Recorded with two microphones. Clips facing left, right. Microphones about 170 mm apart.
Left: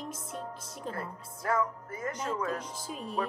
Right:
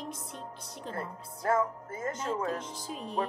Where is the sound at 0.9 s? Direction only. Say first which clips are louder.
Right 1 dB; 25° right (ahead or behind).